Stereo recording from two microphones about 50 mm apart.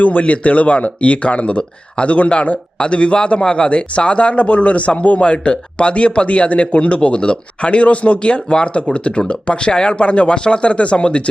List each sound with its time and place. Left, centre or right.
0.0 s speech: left